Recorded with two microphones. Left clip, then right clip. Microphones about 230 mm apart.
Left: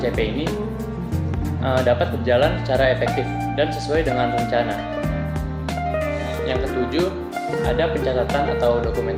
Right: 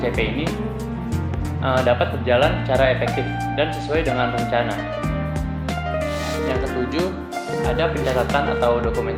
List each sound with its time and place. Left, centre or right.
0.0 s speech: centre
1.6 s speech: centre
8.3 s speech: centre